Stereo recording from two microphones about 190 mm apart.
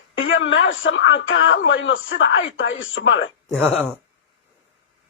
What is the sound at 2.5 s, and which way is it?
Speech, 90° left.